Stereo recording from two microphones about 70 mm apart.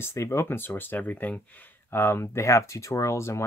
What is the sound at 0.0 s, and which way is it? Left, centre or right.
Speech, left.